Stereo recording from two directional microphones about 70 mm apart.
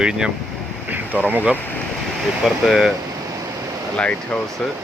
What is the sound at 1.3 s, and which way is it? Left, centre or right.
Speech, right.